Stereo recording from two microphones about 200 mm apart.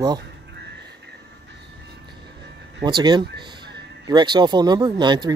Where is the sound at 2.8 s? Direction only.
20° right (ahead or behind).